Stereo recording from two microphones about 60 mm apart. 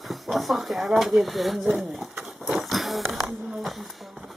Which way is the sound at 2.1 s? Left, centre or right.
Centre.